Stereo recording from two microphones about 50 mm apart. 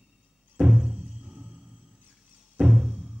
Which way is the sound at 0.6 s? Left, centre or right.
Centre.